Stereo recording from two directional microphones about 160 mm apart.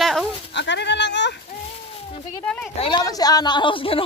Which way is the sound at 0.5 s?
90° left.